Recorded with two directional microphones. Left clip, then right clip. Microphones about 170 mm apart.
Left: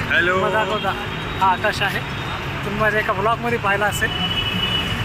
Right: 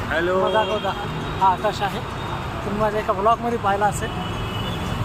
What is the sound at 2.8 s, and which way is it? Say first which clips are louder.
Speech: left 1 dB; 15° left (ahead or behind).